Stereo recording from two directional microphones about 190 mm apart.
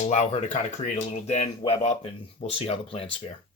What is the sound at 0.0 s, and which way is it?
Speech, 40° left (ahead or behind).